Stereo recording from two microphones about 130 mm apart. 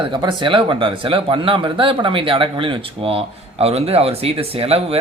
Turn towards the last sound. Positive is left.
turn(degrees=-50)  # may be behind; listen again after turning